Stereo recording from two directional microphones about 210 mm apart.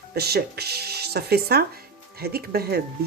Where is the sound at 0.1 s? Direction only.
50° right (ahead or behind).